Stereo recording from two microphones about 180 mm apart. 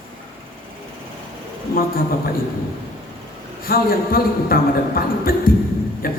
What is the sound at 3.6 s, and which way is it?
A man's voice, 55° left (ahead or behind).